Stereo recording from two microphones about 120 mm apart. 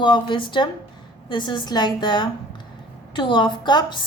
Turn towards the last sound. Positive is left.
turn(degrees=40)  # may be behind; listen again after turning